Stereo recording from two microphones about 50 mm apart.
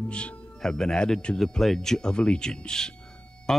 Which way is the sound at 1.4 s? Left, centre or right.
Centre.